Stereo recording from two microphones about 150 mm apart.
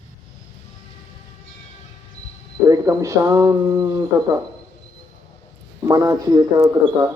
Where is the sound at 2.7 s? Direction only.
20° right (ahead or behind).